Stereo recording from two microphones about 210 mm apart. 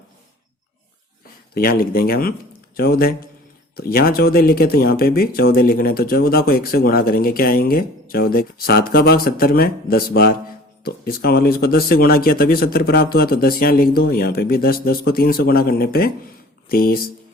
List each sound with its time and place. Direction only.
1.5 s speech: 45° left (ahead or behind)